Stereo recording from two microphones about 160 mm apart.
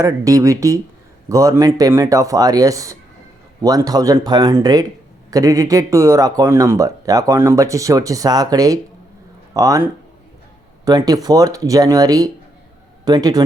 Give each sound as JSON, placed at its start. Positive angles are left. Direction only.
{"t": 0.0, "sound": "speech", "side_deg": -20}